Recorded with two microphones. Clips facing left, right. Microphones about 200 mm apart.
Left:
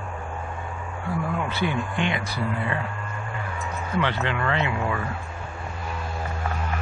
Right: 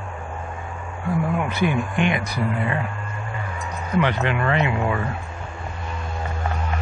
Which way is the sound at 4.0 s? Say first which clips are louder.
Right 4 dB; 20° right (ahead or behind).